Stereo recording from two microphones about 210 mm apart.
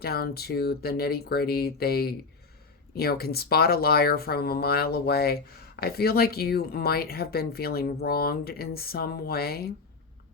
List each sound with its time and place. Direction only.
0.0 s speech: 45° left (ahead or behind)